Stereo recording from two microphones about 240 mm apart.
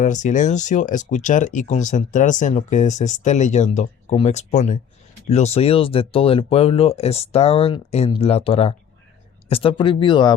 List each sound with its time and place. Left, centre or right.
0.0 s speech: left